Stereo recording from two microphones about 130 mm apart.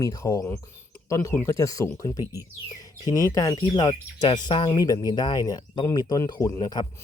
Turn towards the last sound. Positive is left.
turn(degrees=30)  # may be behind; listen again after turning